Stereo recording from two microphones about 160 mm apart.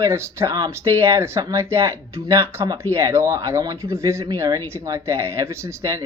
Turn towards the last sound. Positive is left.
turn(degrees=-20)  # may be behind; listen again after turning